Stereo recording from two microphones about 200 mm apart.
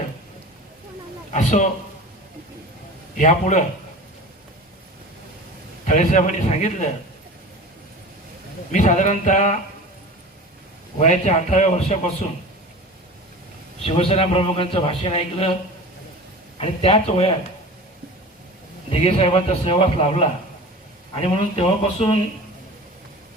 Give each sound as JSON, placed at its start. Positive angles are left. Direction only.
{"t": 1.3, "sound": "a man's voice", "side_deg": 35}
{"t": 3.2, "sound": "a man's voice", "side_deg": 35}
{"t": 5.8, "sound": "a man's voice", "side_deg": 35}
{"t": 8.7, "sound": "a man's voice", "side_deg": 35}
{"t": 11.0, "sound": "a man's voice", "side_deg": 35}
{"t": 13.8, "sound": "a man's voice", "side_deg": 25}
{"t": 16.6, "sound": "a man's voice", "side_deg": 30}
{"t": 18.9, "sound": "a man's voice", "side_deg": 30}